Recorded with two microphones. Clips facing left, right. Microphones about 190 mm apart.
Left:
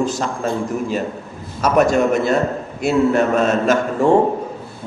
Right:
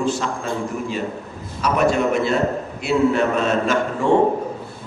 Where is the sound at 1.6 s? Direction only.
45° left (ahead or behind).